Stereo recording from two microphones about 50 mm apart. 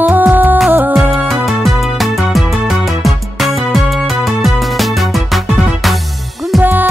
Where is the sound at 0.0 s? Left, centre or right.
Right.